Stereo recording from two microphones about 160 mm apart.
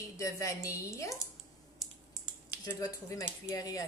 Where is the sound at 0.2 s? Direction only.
20° left (ahead or behind).